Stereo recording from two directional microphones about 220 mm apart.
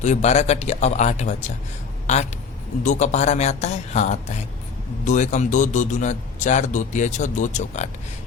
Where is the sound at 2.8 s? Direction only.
30° left (ahead or behind).